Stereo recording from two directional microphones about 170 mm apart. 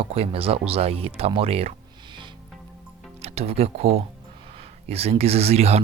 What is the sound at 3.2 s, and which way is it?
Speech, 35° right (ahead or behind).